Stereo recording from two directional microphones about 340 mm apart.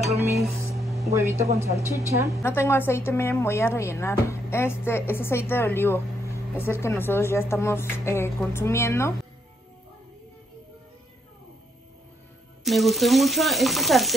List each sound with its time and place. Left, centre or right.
0.0 s a sound: centre
2.0 s a woman's voice: centre
2.4 s a woman's voice: centre
12.6 s speech: centre